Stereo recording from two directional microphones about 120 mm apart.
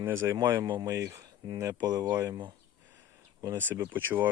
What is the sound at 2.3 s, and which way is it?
Speech, 35° right (ahead or behind).